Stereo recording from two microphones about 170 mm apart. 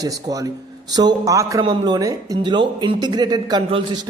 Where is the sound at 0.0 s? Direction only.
20° right (ahead or behind).